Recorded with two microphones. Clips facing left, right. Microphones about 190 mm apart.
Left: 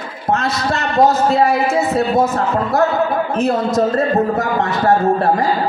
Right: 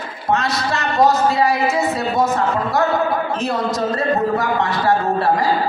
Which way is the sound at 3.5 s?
50° left (ahead or behind).